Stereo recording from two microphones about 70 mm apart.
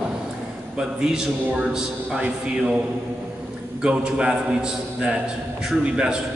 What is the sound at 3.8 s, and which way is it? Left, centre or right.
A man's voice, centre.